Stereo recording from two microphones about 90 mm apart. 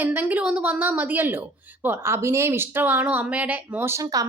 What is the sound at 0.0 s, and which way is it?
A woman's voice, 20° right (ahead or behind).